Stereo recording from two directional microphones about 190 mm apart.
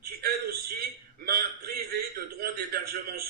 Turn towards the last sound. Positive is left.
turn(degrees=-50)  # may be behind; listen again after turning